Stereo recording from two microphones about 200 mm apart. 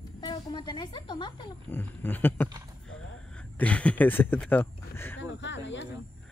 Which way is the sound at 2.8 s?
5° left (ahead or behind).